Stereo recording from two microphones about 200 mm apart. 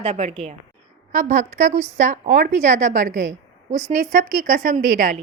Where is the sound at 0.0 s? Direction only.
30° right (ahead or behind).